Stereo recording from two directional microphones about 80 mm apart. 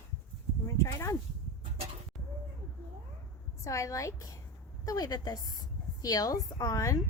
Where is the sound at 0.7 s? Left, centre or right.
Left.